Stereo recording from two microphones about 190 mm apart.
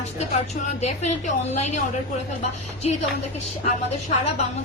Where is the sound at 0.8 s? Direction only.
35° left (ahead or behind).